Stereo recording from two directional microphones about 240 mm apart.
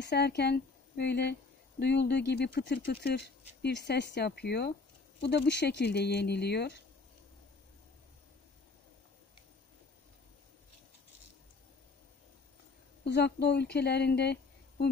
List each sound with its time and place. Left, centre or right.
0.0 s a woman's voice: left
13.0 s a woman's voice: left